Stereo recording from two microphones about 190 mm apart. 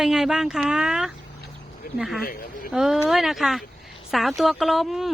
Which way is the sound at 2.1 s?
50° left (ahead or behind).